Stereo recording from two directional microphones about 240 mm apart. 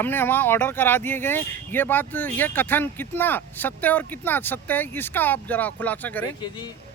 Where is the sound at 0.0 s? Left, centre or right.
Centre.